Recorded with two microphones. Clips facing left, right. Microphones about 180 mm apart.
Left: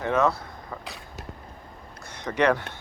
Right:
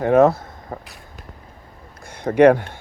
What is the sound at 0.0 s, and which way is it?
Speech, 45° right (ahead or behind).